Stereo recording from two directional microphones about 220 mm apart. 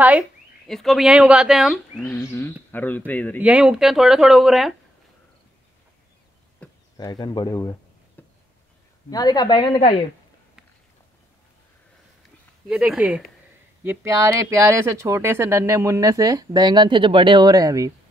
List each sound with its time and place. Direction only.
0.7 s speech: centre (ahead or behind)
2.0 s speech: 10° left (ahead or behind)
3.4 s speech: 5° right (ahead or behind)
6.6 s speech: 15° left (ahead or behind)
8.2 s a sound: 5° left (ahead or behind)
9.1 s speech: 20° left (ahead or behind)
12.6 s speech: 5° right (ahead or behind)